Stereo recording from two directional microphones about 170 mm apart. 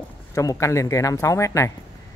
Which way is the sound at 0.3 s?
20° left (ahead or behind).